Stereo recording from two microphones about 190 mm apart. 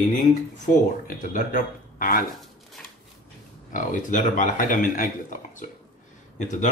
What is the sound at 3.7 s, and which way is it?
Speech, 40° left (ahead or behind).